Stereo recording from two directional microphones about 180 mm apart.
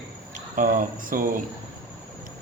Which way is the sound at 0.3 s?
45° right (ahead or behind).